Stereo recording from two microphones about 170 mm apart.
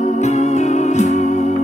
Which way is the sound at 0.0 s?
40° left (ahead or behind).